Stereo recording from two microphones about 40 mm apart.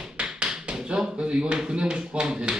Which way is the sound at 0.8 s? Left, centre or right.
Right.